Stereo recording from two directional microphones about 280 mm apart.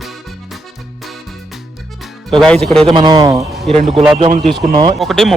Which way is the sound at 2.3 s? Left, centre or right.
Centre.